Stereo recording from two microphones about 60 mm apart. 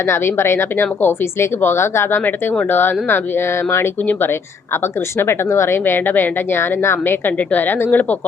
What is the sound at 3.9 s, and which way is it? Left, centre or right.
A woman's voice, left.